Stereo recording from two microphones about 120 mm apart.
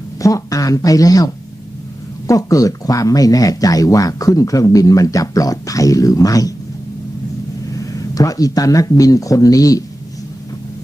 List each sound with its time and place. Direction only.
0.2 s speech: 30° left (ahead or behind)
7.7 s speech: 30° left (ahead or behind)